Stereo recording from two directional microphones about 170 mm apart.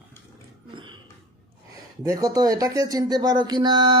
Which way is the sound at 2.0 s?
20° right (ahead or behind).